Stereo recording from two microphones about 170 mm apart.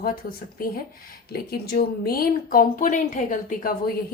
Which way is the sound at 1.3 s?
65° left (ahead or behind).